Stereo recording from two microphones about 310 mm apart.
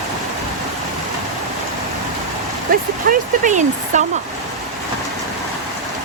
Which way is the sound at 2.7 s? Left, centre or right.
Right.